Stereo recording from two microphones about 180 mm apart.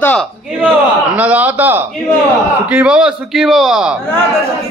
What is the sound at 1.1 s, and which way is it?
A man's voice, 10° right (ahead or behind).